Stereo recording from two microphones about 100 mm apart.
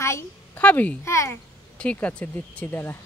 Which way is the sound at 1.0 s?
30° left (ahead or behind).